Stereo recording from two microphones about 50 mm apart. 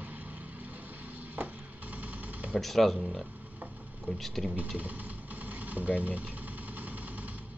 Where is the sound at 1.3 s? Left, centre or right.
Right.